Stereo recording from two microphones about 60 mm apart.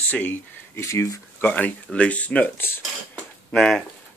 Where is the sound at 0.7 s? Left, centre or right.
Left.